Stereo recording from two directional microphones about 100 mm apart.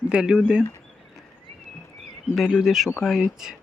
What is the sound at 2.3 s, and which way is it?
Speech, centre (ahead or behind).